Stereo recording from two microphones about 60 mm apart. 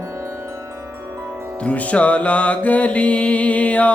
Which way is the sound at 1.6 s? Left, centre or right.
Left.